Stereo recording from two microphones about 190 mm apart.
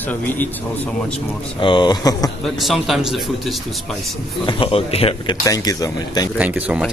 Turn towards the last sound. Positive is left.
turn(degrees=-5)  # may be behind; listen again after turning